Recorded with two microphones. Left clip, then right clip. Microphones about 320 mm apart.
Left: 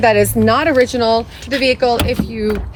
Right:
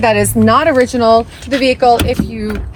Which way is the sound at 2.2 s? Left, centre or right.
Centre.